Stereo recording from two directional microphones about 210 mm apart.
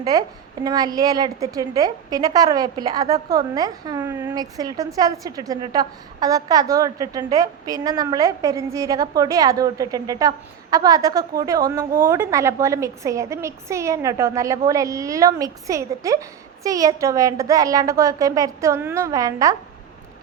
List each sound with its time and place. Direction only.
0.0 s a woman's voice: 15° right (ahead or behind)